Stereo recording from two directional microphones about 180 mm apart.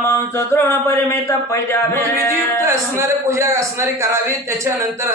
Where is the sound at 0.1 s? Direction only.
15° left (ahead or behind).